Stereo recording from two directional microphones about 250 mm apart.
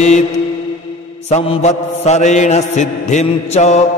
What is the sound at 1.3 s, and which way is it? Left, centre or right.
A man's voice, left.